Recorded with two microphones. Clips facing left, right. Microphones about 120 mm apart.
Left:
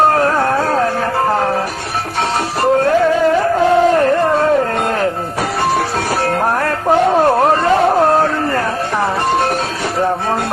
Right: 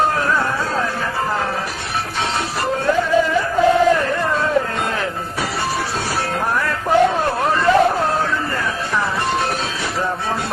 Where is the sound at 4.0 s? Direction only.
45° left (ahead or behind).